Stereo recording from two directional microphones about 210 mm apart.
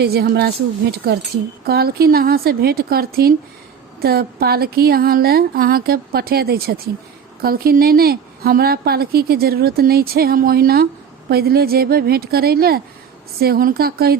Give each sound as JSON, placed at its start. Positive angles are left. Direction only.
{"t": 0.0, "sound": "a woman's voice", "side_deg": -50}